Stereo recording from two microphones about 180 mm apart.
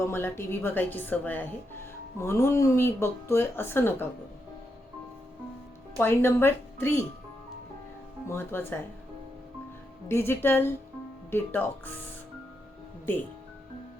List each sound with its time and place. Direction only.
0.0 s speech: 15° left (ahead or behind)
6.0 s speech: 15° left (ahead or behind)
8.3 s speech: 10° left (ahead or behind)
10.1 s speech: 15° left (ahead or behind)
13.1 s speech: 10° left (ahead or behind)